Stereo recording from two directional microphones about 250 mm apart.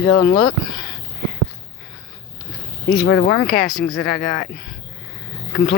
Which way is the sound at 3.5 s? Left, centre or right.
Centre.